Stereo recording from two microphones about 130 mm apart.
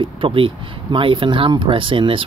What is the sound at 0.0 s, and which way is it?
Speech, 40° right (ahead or behind).